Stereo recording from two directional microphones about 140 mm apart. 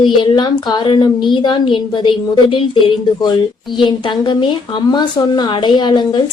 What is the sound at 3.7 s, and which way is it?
Speech, 35° left (ahead or behind).